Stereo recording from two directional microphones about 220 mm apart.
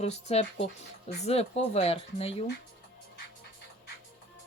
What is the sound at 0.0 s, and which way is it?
Speech, 30° left (ahead or behind).